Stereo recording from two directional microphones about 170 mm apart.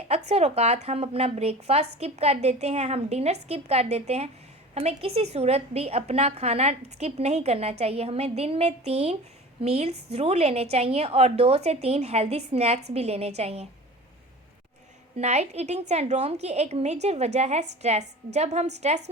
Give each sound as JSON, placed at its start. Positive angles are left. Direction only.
{"t": 0.1, "sound": "a woman's voice", "side_deg": -40}
{"t": 15.2, "sound": "a woman's voice", "side_deg": -40}